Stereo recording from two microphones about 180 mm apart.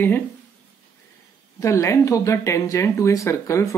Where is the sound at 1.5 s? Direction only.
15° left (ahead or behind).